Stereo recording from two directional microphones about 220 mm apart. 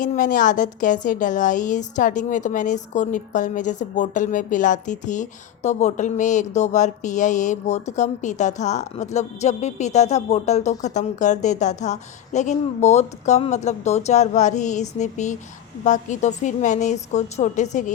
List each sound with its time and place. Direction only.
0.0 s a woman's voice: 35° left (ahead or behind)